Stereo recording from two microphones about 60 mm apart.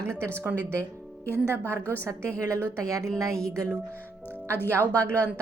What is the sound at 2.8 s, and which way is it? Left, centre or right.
Speech, right.